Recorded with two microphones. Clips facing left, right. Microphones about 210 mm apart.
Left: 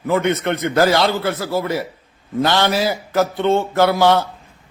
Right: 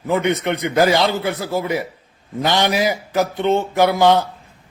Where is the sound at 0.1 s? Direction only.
15° right (ahead or behind).